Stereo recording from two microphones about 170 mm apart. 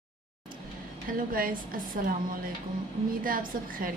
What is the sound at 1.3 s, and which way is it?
Speech, 55° right (ahead or behind).